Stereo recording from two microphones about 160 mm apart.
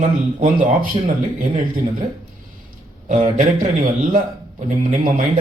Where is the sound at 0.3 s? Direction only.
55° right (ahead or behind).